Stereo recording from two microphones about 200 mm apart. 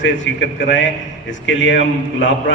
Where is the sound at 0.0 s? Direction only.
65° left (ahead or behind).